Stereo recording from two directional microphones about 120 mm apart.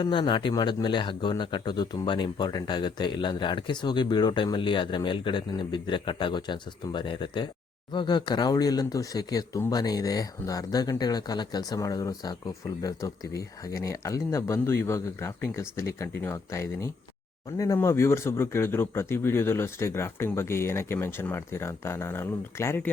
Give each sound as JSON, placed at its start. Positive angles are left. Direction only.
{"t": 0.0, "sound": "speech", "side_deg": 45}